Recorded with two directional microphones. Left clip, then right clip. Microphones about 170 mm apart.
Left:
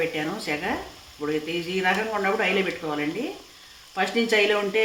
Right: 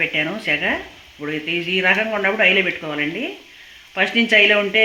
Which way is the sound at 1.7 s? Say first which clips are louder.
Right 6 dB; 45° right (ahead or behind).